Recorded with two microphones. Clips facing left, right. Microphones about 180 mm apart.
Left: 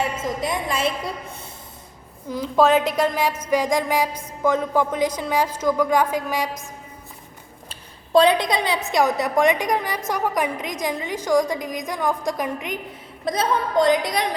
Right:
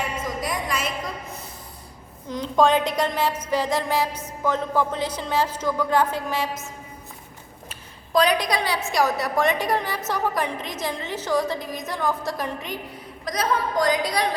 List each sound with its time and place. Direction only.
0.3 s a woman's voice: 25° left (ahead or behind)
2.3 s a woman's voice: 5° left (ahead or behind)
7.7 s a woman's voice: 25° left (ahead or behind)
13.2 s a woman's voice: 25° left (ahead or behind)